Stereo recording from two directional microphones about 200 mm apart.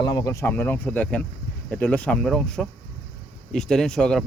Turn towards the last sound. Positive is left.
turn(degrees=5)  # may be behind; listen again after turning